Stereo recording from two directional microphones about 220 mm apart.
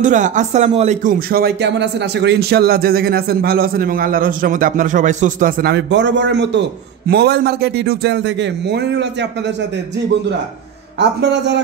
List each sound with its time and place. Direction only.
0.0 s speech: 35° right (ahead or behind); by 9.3 s 50° right (ahead or behind)
11.0 s speech: 50° right (ahead or behind)